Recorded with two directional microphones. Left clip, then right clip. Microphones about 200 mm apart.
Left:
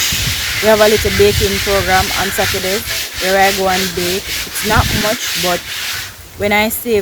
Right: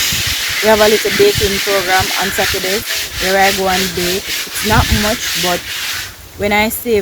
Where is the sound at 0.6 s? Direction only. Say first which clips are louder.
Even; 15° left (ahead or behind).